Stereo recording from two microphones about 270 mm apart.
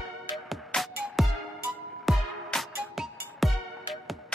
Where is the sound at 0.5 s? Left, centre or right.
Centre.